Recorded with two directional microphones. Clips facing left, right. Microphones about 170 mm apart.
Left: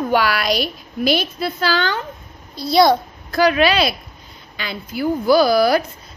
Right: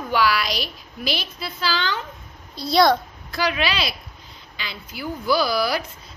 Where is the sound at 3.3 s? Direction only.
50° left (ahead or behind).